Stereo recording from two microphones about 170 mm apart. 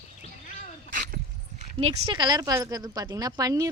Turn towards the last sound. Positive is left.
turn(degrees=-20)  # may be behind; listen again after turning